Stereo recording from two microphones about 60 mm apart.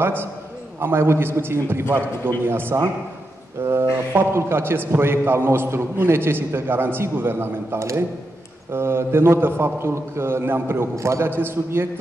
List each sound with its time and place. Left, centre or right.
0.0 s a man's voice: right